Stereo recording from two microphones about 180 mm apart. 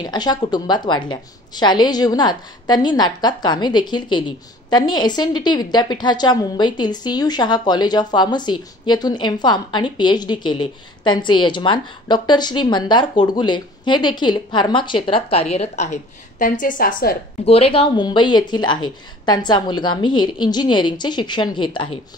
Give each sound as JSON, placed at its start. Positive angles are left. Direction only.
{"t": 0.0, "sound": "a woman's voice", "side_deg": 25}
{"t": 17.5, "sound": "a woman's voice", "side_deg": 30}